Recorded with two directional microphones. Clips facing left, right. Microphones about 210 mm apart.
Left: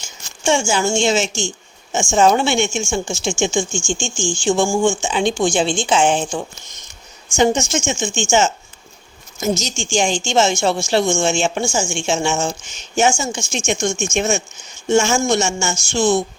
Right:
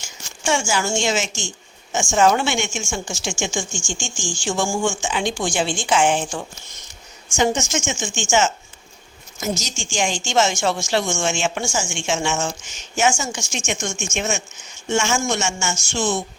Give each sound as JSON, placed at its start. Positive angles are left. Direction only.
{"t": 0.4, "sound": "a woman's voice", "side_deg": 25}